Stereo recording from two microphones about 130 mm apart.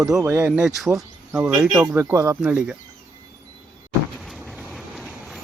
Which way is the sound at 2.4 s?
10° right (ahead or behind).